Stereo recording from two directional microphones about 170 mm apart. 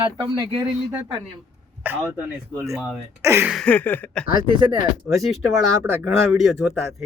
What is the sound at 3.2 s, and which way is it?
Speech, 15° right (ahead or behind).